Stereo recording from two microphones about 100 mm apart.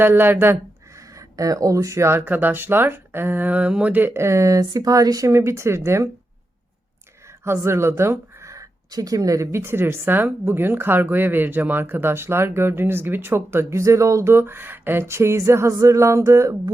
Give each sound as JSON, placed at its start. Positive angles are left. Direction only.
{"t": 0.0, "sound": "speech", "side_deg": -20}
{"t": 7.4, "sound": "speech", "side_deg": -25}